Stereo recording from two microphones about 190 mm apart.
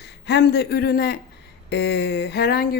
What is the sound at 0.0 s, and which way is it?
A man's voice, 60° left (ahead or behind).